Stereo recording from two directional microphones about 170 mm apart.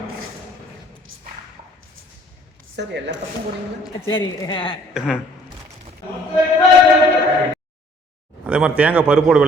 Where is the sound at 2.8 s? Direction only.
90° right.